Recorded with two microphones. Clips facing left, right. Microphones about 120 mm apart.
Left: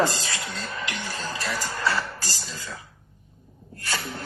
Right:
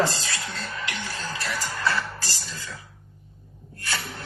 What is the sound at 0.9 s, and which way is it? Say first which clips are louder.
Music: left 1 dB; 40° left (ahead or behind).